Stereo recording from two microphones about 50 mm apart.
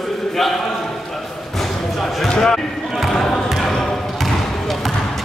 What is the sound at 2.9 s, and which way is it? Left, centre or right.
Basketball bounce, centre.